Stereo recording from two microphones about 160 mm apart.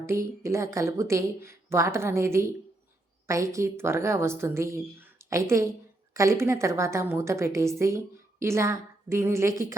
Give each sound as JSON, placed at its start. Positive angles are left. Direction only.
{"t": 0.0, "sound": "a woman's voice", "side_deg": -15}